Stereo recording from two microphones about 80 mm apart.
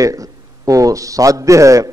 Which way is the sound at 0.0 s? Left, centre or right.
Right.